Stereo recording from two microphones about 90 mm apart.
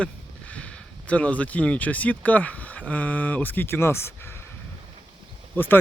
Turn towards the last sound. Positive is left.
turn(degrees=20)  # may be behind; listen again after turning